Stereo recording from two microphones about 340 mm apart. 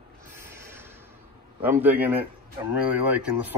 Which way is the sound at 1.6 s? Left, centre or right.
Centre.